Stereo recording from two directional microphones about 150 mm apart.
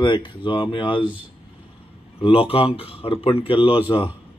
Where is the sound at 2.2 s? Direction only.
40° left (ahead or behind).